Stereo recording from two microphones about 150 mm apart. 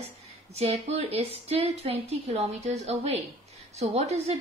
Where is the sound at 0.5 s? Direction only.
45° right (ahead or behind).